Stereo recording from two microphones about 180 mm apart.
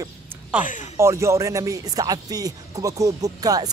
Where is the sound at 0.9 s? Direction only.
15° right (ahead or behind).